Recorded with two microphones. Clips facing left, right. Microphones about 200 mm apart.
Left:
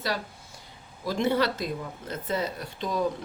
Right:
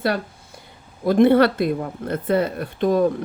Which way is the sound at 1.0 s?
60° right (ahead or behind).